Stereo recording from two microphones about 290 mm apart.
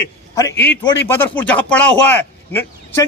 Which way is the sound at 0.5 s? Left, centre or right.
Left.